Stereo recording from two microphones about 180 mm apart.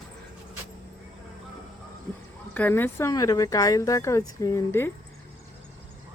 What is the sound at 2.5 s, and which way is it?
Speech, 10° left (ahead or behind).